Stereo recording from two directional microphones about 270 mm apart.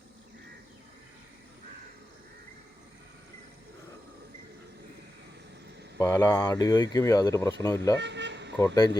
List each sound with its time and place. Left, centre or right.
6.0 s speech: centre
7.9 s speech: right
8.5 s speech: centre